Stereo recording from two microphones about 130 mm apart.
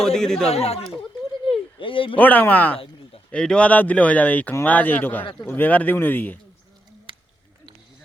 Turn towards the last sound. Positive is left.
turn(degrees=-40)  # may be behind; listen again after turning